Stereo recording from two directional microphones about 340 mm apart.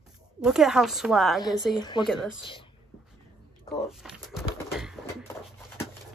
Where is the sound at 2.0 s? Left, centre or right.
Centre.